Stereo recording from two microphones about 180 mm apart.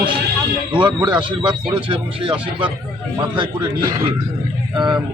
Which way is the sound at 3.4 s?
30° right (ahead or behind).